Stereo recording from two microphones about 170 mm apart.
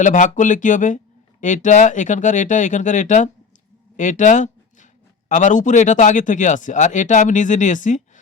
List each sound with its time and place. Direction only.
0.0 s speech: 50° left (ahead or behind)
3.9 s a sound: 45° left (ahead or behind)
5.3 s speech: 45° left (ahead or behind)